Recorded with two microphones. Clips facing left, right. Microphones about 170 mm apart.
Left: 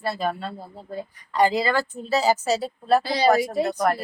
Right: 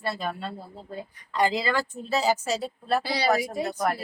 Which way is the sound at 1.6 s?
50° left (ahead or behind).